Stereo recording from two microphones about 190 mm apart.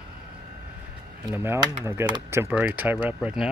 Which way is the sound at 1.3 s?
10° right (ahead or behind).